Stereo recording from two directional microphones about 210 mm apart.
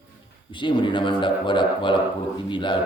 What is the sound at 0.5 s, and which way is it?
Speech, 20° left (ahead or behind).